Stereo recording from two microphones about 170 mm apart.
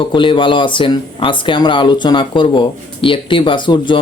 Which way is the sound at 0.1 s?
30° left (ahead or behind).